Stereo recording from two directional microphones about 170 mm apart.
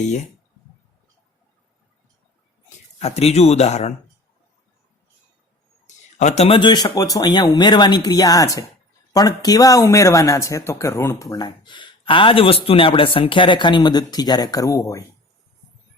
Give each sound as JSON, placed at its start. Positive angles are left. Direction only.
{"t": 3.0, "sound": "speech", "side_deg": 35}
{"t": 6.1, "sound": "speech", "side_deg": 40}